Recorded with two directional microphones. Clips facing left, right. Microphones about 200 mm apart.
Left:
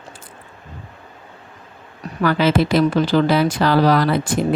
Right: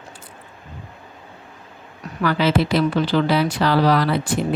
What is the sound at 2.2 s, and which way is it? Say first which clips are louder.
Speech: left 2 dB; 45° left (ahead or behind).